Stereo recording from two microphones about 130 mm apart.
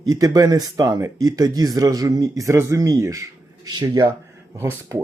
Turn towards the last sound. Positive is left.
turn(degrees=-20)  # may be behind; listen again after turning